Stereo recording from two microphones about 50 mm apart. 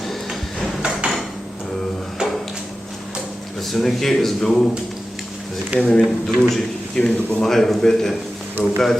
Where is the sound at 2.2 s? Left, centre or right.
Centre.